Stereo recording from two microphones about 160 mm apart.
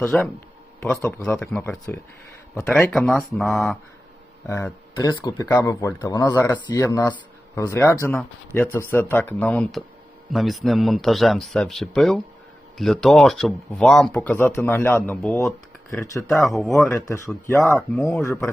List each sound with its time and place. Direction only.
0.0 s speech: 10° left (ahead or behind)
4.4 s speech: 15° left (ahead or behind)
15.9 s speech: 20° left (ahead or behind)
16.3 s speech: centre (ahead or behind)
16.9 s speech: 20° left (ahead or behind)